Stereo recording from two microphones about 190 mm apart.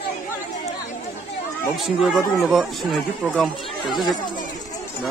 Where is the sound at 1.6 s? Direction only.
Centre (ahead or behind).